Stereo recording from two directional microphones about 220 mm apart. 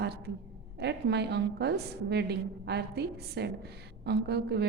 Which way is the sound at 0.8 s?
50° right (ahead or behind).